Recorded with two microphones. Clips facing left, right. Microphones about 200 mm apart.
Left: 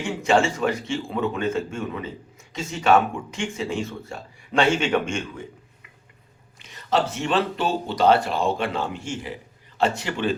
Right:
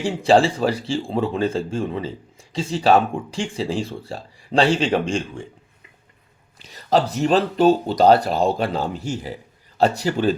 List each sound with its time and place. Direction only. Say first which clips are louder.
0.0 s speech: right 4 dB; 35° right (ahead or behind)
6.6 s speech: right 4 dB; 35° right (ahead or behind)